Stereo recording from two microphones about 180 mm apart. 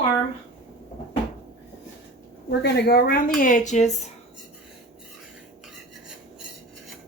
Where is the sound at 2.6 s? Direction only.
65° left (ahead or behind).